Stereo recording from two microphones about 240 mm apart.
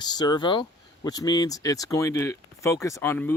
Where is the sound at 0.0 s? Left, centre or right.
Centre.